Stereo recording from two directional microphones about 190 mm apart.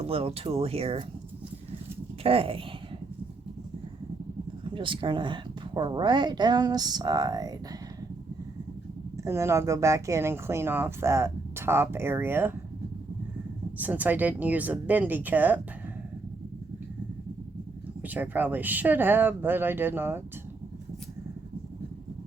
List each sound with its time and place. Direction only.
0.0 s speech: 30° right (ahead or behind)
2.2 s speech: 30° right (ahead or behind)
4.7 s speech: 25° right (ahead or behind)
9.1 s speech: 15° right (ahead or behind)
13.7 s speech: 10° right (ahead or behind)
18.0 s speech: 10° right (ahead or behind)